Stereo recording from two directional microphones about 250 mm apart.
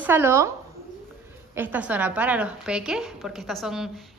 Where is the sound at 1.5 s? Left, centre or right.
Centre.